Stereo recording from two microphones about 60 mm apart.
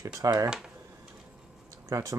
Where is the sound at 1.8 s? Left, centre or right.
Right.